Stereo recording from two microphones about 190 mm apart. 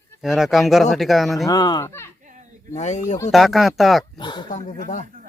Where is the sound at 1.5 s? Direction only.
20° left (ahead or behind).